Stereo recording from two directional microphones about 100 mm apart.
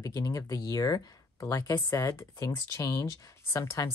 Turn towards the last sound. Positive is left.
turn(degrees=30)  # may be behind; listen again after turning